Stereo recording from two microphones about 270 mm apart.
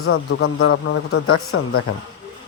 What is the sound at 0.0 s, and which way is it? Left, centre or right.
Speech, left.